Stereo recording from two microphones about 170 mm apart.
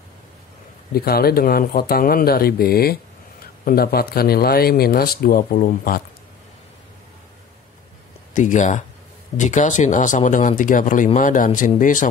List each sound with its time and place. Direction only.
0.9 s speech: 65° left (ahead or behind)
8.3 s speech: 50° left (ahead or behind)